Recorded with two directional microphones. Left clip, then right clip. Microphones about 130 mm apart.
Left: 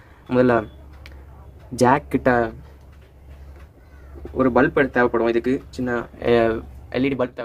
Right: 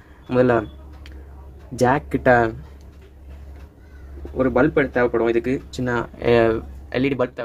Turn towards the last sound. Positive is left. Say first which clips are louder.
# right 1 dB
turn(degrees=-5)  # may be behind; listen again after turning